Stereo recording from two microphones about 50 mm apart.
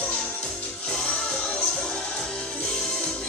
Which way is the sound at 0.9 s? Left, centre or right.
Centre.